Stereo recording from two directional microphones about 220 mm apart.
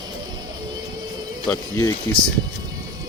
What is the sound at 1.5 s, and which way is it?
Speech, 15° left (ahead or behind).